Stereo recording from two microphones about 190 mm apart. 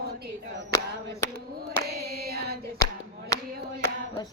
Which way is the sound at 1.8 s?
55° right (ahead or behind).